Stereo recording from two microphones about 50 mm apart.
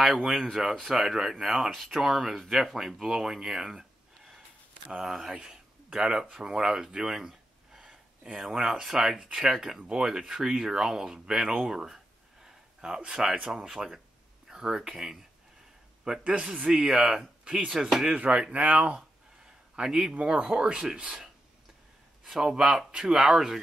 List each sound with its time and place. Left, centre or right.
0.1 s speech: centre
18.1 s speech: right
18.9 s a sound: centre
20.2 s speech: centre